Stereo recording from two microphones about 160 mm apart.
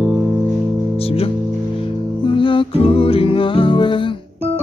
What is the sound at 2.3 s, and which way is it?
Music, 30° left (ahead or behind).